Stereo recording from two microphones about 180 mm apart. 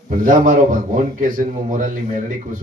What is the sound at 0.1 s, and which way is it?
A man's voice, 50° right (ahead or behind).